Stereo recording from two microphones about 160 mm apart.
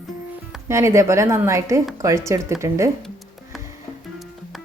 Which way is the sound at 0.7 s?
15° right (ahead or behind).